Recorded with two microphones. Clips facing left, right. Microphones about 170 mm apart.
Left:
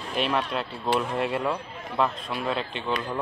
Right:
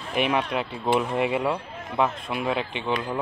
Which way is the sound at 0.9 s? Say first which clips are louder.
Right 3 dB; 15° right (ahead or behind).